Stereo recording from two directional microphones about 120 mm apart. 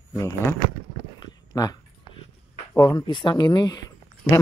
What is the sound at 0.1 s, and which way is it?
Speech, 25° left (ahead or behind).